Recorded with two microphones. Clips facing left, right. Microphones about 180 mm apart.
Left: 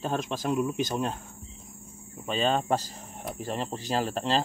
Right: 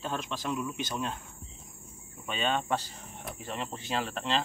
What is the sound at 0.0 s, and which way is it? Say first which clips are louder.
Speech: left 5 dB; 40° left (ahead or behind).